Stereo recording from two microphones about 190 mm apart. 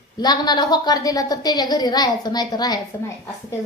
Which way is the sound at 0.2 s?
20° left (ahead or behind).